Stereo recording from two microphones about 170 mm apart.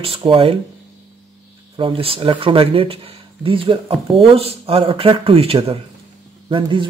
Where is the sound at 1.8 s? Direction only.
30° right (ahead or behind).